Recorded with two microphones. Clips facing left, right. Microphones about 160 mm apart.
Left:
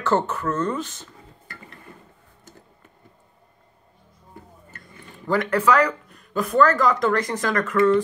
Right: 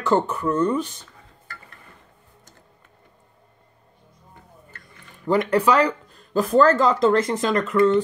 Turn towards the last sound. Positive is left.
turn(degrees=-20)  # may be behind; listen again after turning